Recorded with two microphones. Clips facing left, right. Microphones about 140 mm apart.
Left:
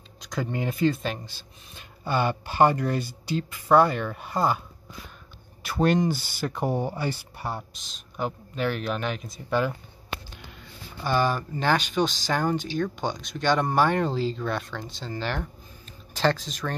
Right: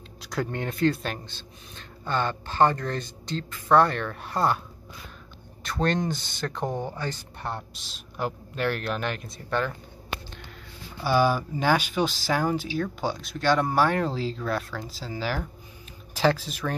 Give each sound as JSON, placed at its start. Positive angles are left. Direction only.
{"t": 0.2, "sound": "speech", "side_deg": 0}
{"t": 5.6, "sound": "speech", "side_deg": 10}
{"t": 11.0, "sound": "speech", "side_deg": -5}